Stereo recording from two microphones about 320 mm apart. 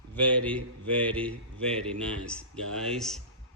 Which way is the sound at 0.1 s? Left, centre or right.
Centre.